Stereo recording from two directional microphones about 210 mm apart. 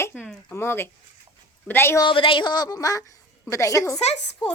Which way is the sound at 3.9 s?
30° left (ahead or behind).